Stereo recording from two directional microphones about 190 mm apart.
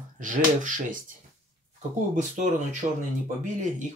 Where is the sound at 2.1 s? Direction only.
40° right (ahead or behind).